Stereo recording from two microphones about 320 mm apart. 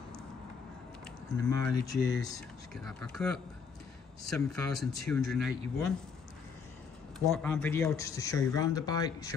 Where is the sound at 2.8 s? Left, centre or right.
Centre.